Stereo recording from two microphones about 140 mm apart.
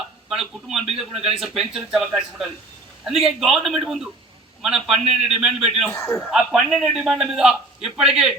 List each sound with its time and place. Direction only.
0.3 s a man's voice: 5° right (ahead or behind)
5.9 s a man's voice: 20° left (ahead or behind)
6.3 s a man's voice: 5° right (ahead or behind)